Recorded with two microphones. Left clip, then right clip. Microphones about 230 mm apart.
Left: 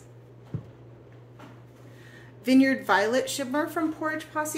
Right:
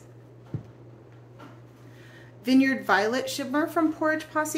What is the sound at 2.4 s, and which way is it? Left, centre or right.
Speech, centre.